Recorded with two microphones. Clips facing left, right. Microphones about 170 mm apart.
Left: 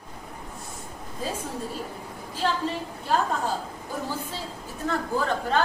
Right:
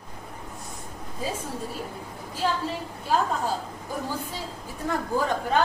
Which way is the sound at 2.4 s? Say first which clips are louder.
Even; 10° right (ahead or behind).